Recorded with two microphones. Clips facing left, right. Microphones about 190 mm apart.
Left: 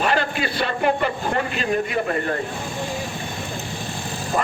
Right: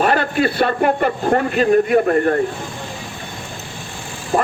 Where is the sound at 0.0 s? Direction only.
50° right (ahead or behind).